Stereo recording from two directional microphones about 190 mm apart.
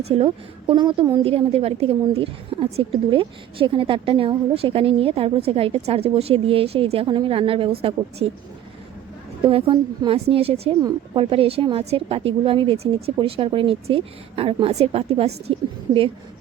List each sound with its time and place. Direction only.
0.0 s a woman's voice: 30° right (ahead or behind)
9.4 s a woman's voice: 30° right (ahead or behind)
10.8 s a woman's voice: 20° right (ahead or behind)